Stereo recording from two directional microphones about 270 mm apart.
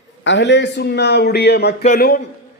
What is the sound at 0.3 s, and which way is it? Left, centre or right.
A man's voice, left.